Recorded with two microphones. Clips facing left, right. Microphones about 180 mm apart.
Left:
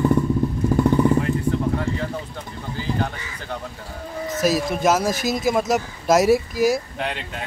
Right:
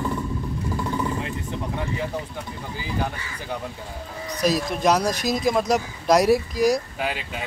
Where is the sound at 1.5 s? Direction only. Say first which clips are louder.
Left 6 dB; 15° right (ahead or behind).